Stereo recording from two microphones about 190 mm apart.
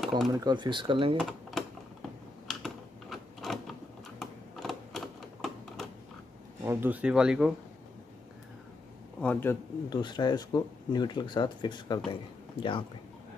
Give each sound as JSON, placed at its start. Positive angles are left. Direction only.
{"t": 0.3, "sound": "speech", "side_deg": -20}
{"t": 1.1, "sound": "typing", "side_deg": 0}
{"t": 4.2, "sound": "typewriter", "side_deg": 0}
{"t": 6.6, "sound": "speech", "side_deg": -15}
{"t": 9.2, "sound": "a man's voice", "side_deg": 10}
{"t": 10.0, "sound": "speech", "side_deg": 20}